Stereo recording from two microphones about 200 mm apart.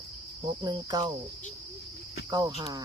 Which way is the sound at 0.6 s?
20° right (ahead or behind).